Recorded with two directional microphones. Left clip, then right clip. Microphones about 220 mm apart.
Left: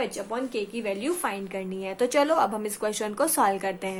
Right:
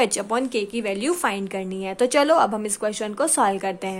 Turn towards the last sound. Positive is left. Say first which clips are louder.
# right 3 dB
turn(degrees=-15)  # may be behind; listen again after turning